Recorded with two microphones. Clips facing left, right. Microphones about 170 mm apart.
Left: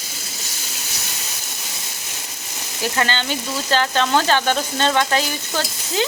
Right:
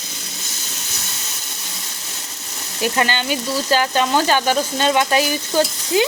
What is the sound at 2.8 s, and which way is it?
A woman's voice, 15° right (ahead or behind).